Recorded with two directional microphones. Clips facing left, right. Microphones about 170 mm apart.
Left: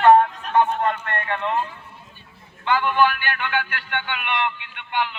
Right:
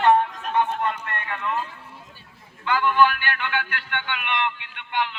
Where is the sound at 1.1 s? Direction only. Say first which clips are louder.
Left 5 dB; 35° left (ahead or behind).